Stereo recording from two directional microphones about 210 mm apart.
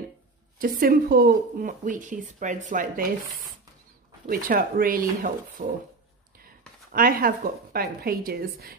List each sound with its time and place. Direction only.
0.6 s speech: 40° right (ahead or behind)
6.9 s a woman's voice: 45° right (ahead or behind)